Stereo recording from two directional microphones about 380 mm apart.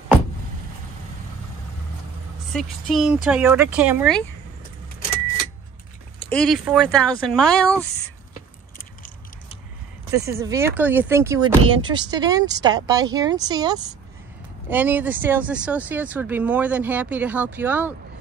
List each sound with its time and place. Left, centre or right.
2.5 s speech: centre
6.1 s speech: centre
8.7 s a sound: left
10.1 s speech: centre